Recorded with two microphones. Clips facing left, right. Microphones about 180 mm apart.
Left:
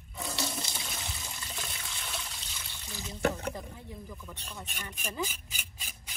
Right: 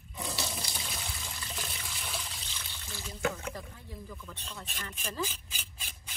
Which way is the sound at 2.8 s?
20° left (ahead or behind).